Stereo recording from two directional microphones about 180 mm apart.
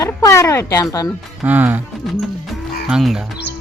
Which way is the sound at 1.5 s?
10° right (ahead or behind).